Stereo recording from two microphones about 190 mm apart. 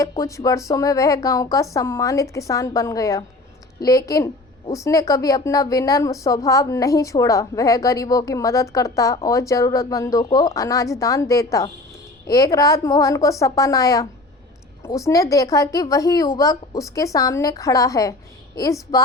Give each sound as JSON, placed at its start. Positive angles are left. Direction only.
{"t": 0.0, "sound": "a woman's voice", "side_deg": 15}